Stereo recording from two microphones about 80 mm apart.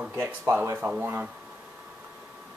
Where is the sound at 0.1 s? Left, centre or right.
Right.